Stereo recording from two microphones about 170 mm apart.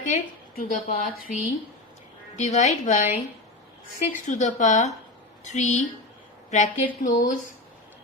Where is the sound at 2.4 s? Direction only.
40° left (ahead or behind).